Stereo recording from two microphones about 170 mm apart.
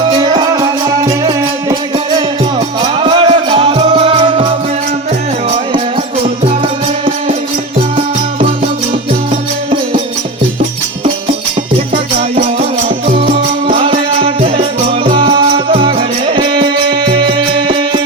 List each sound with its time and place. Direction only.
0.2 s music: 25° right (ahead or behind)
3.0 s music: 30° right (ahead or behind)
7.9 s music: 30° right (ahead or behind)
13.2 s music: 30° right (ahead or behind)